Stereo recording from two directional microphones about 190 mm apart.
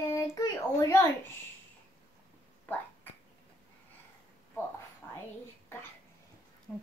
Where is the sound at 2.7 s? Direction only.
10° left (ahead or behind).